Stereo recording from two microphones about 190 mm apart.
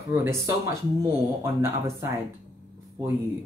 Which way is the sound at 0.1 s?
10° right (ahead or behind).